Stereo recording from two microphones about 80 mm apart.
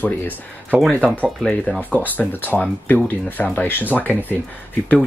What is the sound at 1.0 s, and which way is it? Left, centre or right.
Speech, centre.